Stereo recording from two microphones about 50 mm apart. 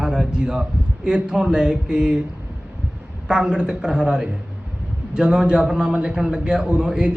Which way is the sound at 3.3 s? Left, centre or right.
Centre.